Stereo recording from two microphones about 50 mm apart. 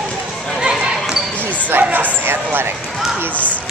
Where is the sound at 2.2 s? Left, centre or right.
Right.